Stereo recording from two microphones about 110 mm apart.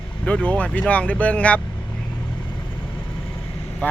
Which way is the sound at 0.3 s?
10° left (ahead or behind).